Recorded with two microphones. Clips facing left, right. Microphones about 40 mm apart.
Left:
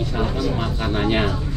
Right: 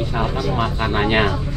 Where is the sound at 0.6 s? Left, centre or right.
Right.